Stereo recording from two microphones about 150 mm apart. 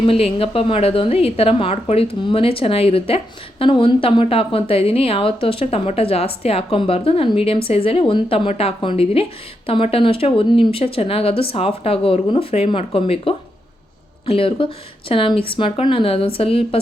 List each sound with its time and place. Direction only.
0.0 s a woman's voice: 40° left (ahead or behind)